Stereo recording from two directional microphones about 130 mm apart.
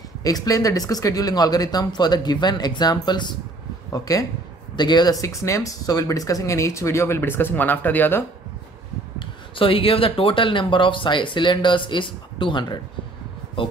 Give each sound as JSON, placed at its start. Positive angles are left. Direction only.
{"t": 0.2, "sound": "speech", "side_deg": 25}
{"t": 9.2, "sound": "speech", "side_deg": 45}